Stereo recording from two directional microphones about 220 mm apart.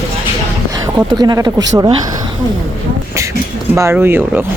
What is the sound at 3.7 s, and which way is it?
Speech, 10° right (ahead or behind).